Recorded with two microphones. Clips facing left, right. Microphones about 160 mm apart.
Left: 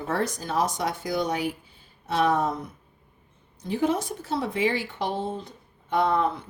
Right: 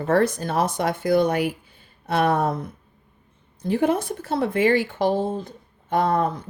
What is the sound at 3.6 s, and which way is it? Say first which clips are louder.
Speech: right 4 dB; 60° right (ahead or behind).